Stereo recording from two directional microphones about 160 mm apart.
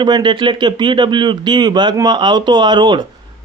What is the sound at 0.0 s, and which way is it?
Speech, 30° right (ahead or behind).